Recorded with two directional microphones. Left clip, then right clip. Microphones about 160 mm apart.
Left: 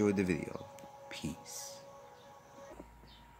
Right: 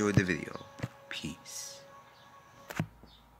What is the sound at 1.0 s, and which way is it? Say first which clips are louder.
Music: right 2 dB; 10° left (ahead or behind).